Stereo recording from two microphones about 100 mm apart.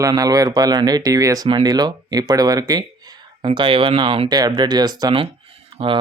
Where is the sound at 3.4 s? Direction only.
55° right (ahead or behind).